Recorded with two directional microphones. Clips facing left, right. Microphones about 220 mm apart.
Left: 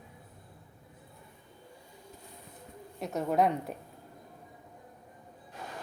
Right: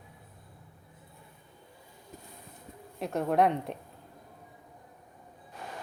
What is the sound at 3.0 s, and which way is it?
Speech, centre (ahead or behind).